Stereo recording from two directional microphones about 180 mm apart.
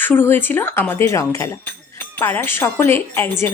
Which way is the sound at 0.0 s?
10° left (ahead or behind).